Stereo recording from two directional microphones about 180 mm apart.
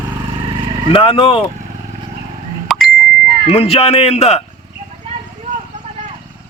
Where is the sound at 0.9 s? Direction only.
30° left (ahead or behind).